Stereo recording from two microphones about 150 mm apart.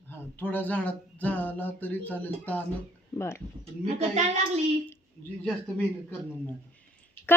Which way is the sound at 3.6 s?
45° right (ahead or behind).